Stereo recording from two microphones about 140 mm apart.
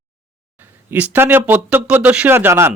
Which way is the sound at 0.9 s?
10° right (ahead or behind).